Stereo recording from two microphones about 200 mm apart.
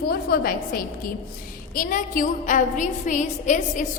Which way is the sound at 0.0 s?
50° left (ahead or behind).